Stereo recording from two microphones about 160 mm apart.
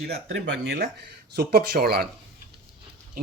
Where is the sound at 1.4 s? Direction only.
70° right (ahead or behind).